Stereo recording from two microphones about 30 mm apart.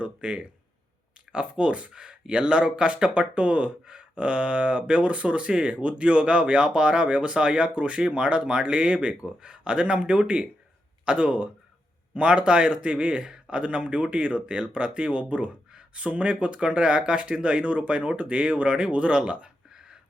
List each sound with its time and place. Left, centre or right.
0.0 s speech: right